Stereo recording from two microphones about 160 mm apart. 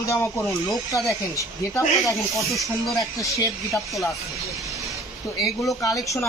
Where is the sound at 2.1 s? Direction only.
20° left (ahead or behind).